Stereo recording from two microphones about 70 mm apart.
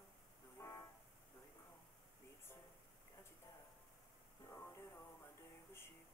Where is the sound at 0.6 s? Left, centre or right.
Left.